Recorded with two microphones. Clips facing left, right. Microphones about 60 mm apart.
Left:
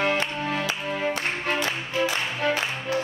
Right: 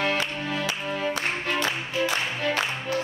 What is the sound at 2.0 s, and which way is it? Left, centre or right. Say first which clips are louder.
Music: left 1 dB; centre.